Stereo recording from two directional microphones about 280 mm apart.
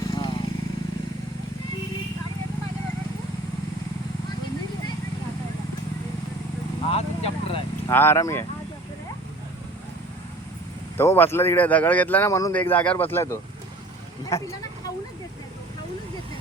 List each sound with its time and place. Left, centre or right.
0.1 s vehicle: centre
6.9 s vehicle: left
7.9 s speech: centre
10.9 s speech: centre